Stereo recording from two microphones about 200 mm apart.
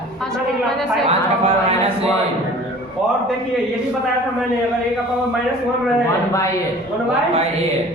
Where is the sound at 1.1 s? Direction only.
30° right (ahead or behind).